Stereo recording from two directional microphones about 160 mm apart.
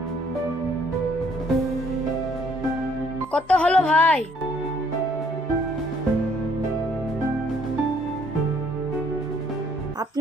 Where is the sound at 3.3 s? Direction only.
5° left (ahead or behind).